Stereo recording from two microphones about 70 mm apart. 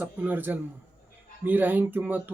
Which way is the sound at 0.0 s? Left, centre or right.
Right.